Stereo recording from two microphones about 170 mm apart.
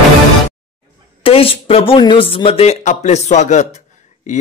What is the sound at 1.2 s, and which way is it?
A man's voice, 35° left (ahead or behind).